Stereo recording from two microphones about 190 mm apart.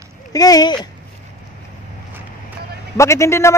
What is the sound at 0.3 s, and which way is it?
Speech, 20° left (ahead or behind).